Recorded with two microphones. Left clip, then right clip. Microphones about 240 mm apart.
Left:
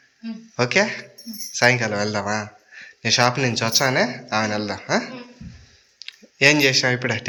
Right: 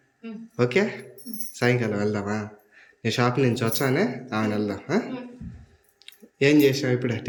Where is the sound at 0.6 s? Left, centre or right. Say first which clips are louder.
Left 4 dB; centre.